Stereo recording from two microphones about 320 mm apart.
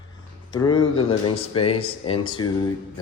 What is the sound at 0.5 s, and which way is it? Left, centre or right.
Speech, centre.